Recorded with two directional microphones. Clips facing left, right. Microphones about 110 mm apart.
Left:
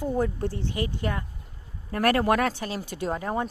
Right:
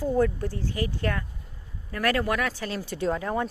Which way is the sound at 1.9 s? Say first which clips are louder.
Left 3 dB; 40° left (ahead or behind).